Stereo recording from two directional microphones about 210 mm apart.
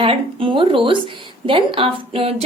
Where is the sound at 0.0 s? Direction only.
25° right (ahead or behind).